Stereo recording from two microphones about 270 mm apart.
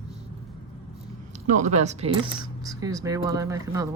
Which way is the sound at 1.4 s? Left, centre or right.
Right.